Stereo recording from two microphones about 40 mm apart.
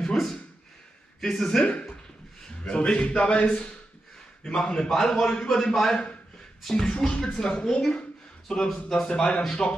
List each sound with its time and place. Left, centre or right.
0.0 s a sound: centre
1.2 s a man's voice: centre
1.7 s a man's voice: left
4.5 s a man's voice: centre
9.0 s a man's voice: centre